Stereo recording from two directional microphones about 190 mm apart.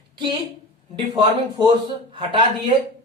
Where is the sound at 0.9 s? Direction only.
25° right (ahead or behind).